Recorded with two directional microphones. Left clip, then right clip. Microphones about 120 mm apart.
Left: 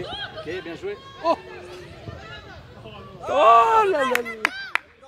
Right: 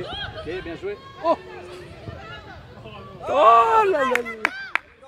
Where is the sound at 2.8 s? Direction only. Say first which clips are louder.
Right 1 dB; 5° left (ahead or behind).